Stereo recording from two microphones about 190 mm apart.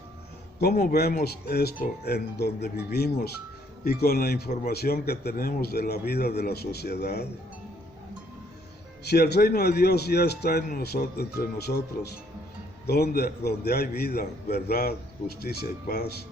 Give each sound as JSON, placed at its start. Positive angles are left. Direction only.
{"t": 0.8, "sound": "a man's voice", "side_deg": 55}
{"t": 9.0, "sound": "a man's voice", "side_deg": 55}
{"t": 12.9, "sound": "a man's voice", "side_deg": 55}